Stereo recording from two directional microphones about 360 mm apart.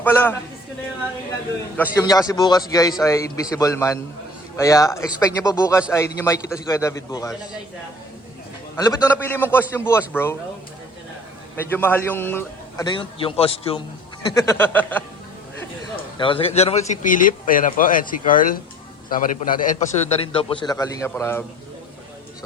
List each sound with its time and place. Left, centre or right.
0.0 s a man's voice: centre
1.7 s a man's voice: centre
8.7 s a man's voice: centre
11.5 s a man's voice: centre
16.1 s a man's voice: centre